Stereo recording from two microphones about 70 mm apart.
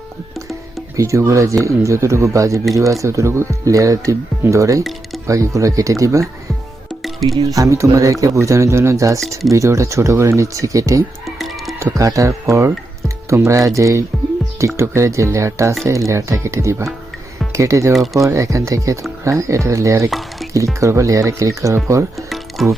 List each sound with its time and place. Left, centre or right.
0.9 s speech: right
7.4 s speech: right
17.9 s speech: centre
18.2 s speech: right
20.4 s music: centre
20.8 s speech: right
22.3 s music: centre